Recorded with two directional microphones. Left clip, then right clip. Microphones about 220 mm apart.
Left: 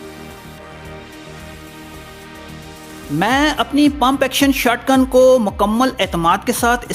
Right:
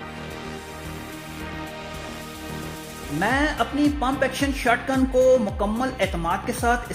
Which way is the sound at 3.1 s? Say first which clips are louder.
Left 7 dB; 35° left (ahead or behind).